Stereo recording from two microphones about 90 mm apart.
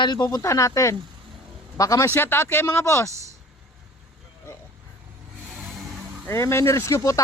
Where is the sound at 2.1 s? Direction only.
25° left (ahead or behind).